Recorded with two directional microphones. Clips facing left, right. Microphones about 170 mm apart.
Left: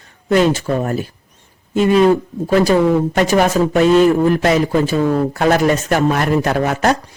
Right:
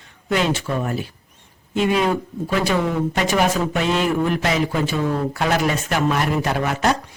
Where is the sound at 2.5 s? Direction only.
40° left (ahead or behind).